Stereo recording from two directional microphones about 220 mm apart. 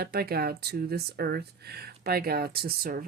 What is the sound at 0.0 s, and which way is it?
A woman's voice, 45° right (ahead or behind).